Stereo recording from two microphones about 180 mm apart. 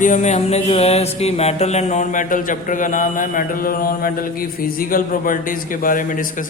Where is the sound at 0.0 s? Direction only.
45° left (ahead or behind).